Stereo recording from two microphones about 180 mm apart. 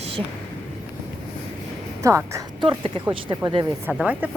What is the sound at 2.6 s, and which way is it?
Speech, 30° right (ahead or behind).